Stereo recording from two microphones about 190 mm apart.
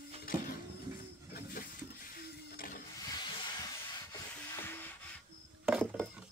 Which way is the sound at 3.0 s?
20° left (ahead or behind).